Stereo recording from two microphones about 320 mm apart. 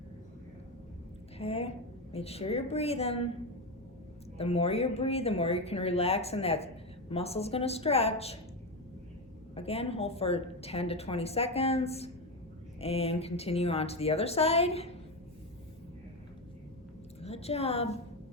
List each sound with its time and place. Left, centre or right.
1.4 s a woman's voice: centre
4.4 s a woman's voice: centre
9.6 s a woman's voice: centre
17.2 s a woman's voice: centre